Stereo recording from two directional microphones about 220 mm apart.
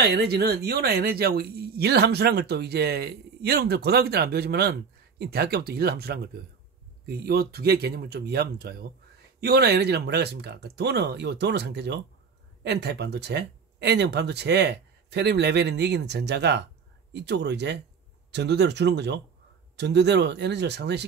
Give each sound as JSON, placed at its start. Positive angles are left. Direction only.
{"t": 0.0, "sound": "speech", "side_deg": -45}